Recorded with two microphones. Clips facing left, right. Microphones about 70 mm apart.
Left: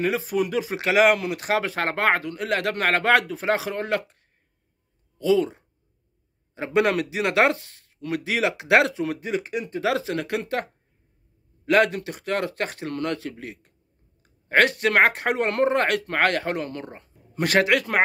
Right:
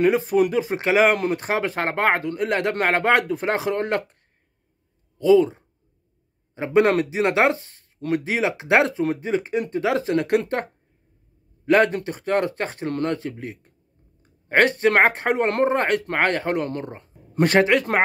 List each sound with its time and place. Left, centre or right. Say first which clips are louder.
0.0 s speech: right 6 dB; right
3.3 s speech: right 2 dB; right
5.2 s speech: right 5 dB; right
11.6 s speech: right 2 dB; right
16.5 s speech: right 5 dB; right
16.8 s speech: right 4 dB; right